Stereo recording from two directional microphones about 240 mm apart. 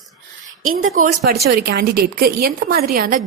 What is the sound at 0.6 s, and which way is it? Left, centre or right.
Speech, right.